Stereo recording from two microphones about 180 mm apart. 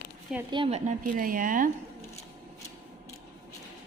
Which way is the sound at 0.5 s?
30° right (ahead or behind).